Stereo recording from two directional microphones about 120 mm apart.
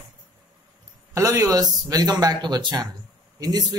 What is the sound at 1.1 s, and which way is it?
Speech, 30° right (ahead or behind).